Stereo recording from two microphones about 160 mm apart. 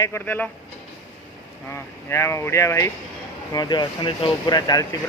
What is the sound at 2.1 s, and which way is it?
Speech, 15° left (ahead or behind).